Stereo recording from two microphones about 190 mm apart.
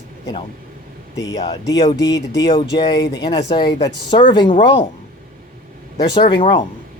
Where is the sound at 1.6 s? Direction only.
20° left (ahead or behind).